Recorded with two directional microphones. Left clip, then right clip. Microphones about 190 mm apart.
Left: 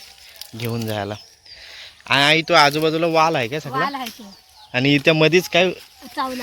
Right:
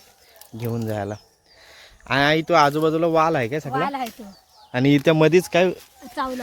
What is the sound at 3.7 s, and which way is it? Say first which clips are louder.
Speech: left 2 dB; 40° right (ahead or behind).